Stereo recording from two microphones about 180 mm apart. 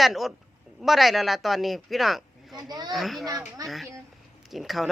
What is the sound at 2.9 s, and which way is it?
Speech, centre (ahead or behind).